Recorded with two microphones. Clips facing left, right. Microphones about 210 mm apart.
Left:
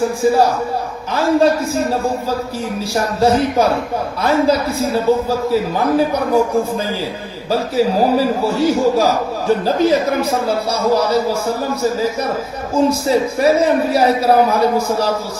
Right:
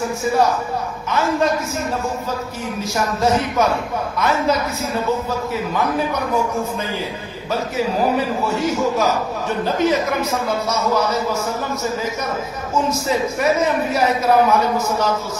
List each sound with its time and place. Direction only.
0.2 s a man's voice: 30° left (ahead or behind)
2.9 s a man's voice: 35° left (ahead or behind)
7.5 s a man's voice: 35° left (ahead or behind)